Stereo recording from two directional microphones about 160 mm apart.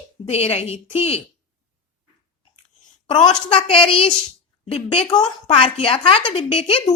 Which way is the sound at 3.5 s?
40° left (ahead or behind).